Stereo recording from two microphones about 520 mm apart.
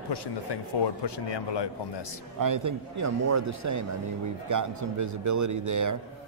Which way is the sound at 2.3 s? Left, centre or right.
Right.